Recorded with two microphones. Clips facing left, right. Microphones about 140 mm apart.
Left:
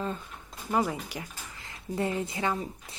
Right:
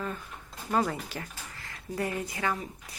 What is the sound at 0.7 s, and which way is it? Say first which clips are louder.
Speech: even; 15° left (ahead or behind).